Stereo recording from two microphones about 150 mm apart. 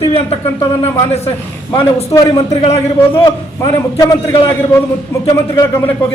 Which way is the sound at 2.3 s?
40° left (ahead or behind).